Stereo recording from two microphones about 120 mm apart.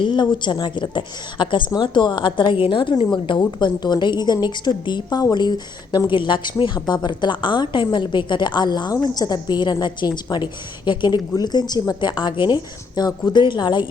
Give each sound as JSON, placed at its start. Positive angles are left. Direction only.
{"t": 0.0, "sound": "a woman's voice", "side_deg": 40}